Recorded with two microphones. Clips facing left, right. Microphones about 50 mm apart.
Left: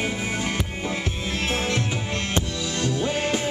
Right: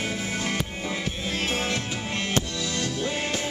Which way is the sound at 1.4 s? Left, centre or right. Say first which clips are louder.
Left 2 dB; left.